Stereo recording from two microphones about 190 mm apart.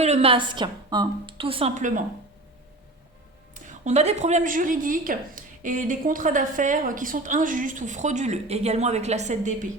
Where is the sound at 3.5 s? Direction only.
40° right (ahead or behind).